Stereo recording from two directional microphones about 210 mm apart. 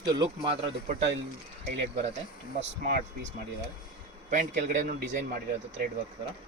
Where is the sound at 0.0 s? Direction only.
20° right (ahead or behind).